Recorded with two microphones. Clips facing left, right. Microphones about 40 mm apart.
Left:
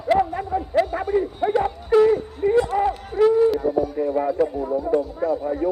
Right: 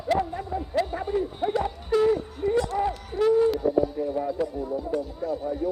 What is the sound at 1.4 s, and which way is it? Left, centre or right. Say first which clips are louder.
Bow-wow: left 5 dB; left.